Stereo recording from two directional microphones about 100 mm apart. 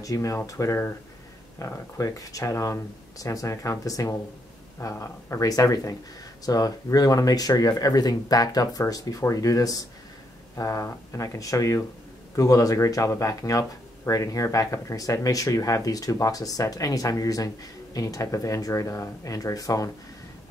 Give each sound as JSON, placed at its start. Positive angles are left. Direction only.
{"t": 0.0, "sound": "speech", "side_deg": 35}